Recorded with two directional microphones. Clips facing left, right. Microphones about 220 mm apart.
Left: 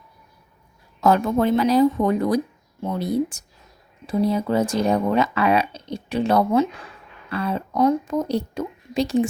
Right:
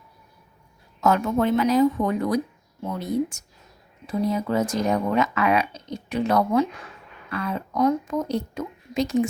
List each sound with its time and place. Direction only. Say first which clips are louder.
1.0 s speech: left 3 dB; 35° left (ahead or behind)